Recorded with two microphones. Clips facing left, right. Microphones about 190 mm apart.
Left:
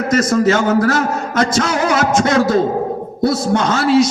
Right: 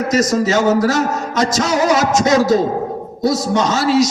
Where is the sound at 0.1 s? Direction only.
55° left (ahead or behind).